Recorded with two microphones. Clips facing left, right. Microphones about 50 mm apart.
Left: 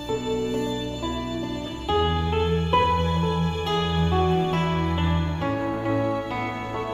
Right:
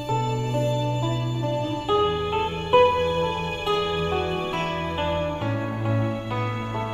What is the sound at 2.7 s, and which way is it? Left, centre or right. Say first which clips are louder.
Music: right 5 dB; centre.